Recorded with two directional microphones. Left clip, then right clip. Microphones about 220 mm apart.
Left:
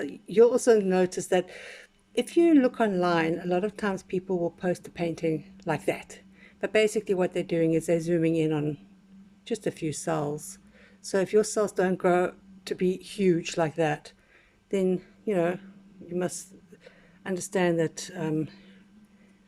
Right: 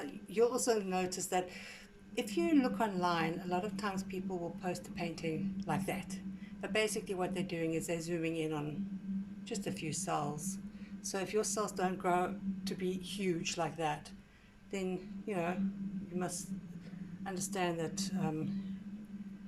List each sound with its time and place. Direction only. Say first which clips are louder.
0.0 s speech: left 12 dB; 35° left (ahead or behind)